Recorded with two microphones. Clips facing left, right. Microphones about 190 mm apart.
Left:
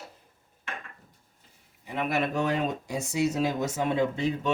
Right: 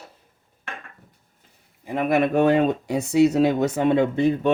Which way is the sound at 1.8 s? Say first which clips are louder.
Right 8 dB; 50° right (ahead or behind).